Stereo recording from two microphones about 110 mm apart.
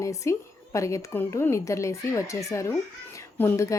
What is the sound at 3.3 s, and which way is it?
Speech, 25° left (ahead or behind).